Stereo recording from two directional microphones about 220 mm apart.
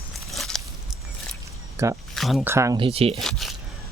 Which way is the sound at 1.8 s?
10° right (ahead or behind).